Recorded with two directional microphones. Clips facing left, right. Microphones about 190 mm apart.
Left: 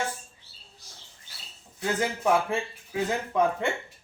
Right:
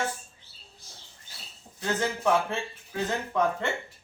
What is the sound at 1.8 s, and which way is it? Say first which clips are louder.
Speech: even; 10° left (ahead or behind).